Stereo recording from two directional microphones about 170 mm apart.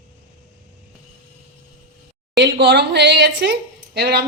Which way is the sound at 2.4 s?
90° right.